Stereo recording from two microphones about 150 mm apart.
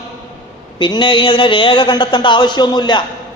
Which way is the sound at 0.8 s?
30° left (ahead or behind).